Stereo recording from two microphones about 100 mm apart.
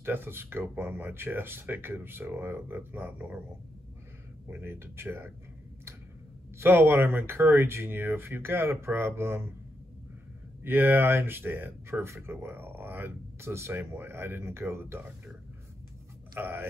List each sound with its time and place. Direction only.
0.0 s speech: 20° right (ahead or behind)
4.5 s speech: 25° right (ahead or behind)
6.6 s speech: 25° right (ahead or behind)
10.6 s speech: 20° right (ahead or behind)
16.3 s speech: 20° right (ahead or behind)